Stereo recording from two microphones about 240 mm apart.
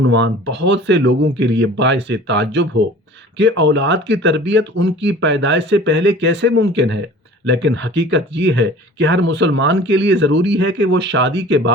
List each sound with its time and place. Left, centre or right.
0.1 s speech: right